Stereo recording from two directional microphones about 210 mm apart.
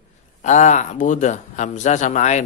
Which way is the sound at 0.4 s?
35° left (ahead or behind).